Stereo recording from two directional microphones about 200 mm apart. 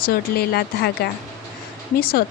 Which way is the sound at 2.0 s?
50° left (ahead or behind).